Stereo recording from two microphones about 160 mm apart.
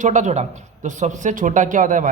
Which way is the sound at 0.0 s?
50° right (ahead or behind).